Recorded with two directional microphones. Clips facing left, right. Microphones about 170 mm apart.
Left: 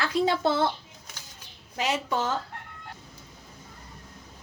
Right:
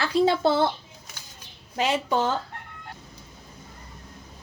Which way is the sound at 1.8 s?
30° right (ahead or behind).